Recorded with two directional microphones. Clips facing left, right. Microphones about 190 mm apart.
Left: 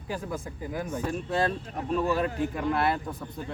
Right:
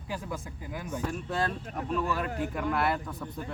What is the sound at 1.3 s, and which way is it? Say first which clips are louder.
Speech: left 5 dB; 25° left (ahead or behind).